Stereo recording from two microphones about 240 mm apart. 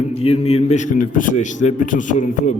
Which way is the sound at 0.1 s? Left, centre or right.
Left.